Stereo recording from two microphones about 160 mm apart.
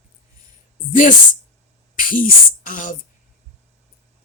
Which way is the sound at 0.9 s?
55° left (ahead or behind).